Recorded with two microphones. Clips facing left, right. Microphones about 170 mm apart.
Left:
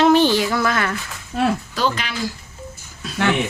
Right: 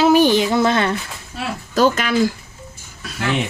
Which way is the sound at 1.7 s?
45° right (ahead or behind).